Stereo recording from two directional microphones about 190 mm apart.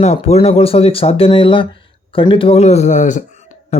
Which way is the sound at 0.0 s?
35° left (ahead or behind).